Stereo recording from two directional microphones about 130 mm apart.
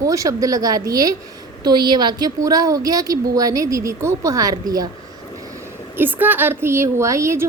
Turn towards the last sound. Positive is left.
turn(degrees=-20)  # may be behind; listen again after turning